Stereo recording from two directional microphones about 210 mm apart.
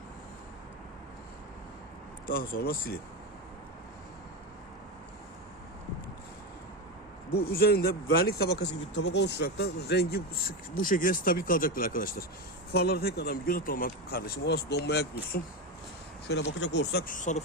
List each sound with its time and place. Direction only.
2.2 s speech: 40° left (ahead or behind)
7.3 s speech: 50° left (ahead or behind)
16.3 s speech: 55° left (ahead or behind); by 17.4 s 35° left (ahead or behind)